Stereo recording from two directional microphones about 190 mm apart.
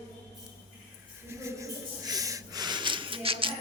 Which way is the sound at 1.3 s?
15° right (ahead or behind).